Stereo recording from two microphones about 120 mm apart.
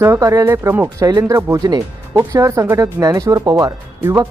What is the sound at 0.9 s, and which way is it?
Speech, 30° right (ahead or behind).